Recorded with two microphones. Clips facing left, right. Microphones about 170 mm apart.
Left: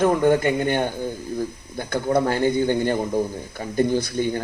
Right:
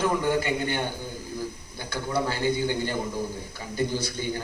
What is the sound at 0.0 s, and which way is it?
Speech, 50° left (ahead or behind).